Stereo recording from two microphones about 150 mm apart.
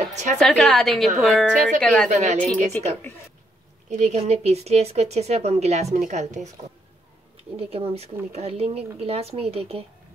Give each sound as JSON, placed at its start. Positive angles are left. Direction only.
{"t": 0.1, "sound": "a woman's voice", "side_deg": -50}
{"t": 0.4, "sound": "a woman's voice", "side_deg": 5}
{"t": 2.0, "sound": "a woman's voice", "side_deg": -50}
{"t": 2.3, "sound": "speech", "side_deg": 10}
{"t": 3.9, "sound": "a woman's voice", "side_deg": -50}
{"t": 7.5, "sound": "a woman's voice", "side_deg": -40}